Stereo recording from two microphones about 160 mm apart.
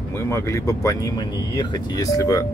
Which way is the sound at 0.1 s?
15° left (ahead or behind).